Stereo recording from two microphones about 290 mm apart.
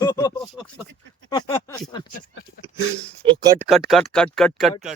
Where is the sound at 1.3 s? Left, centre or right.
Centre.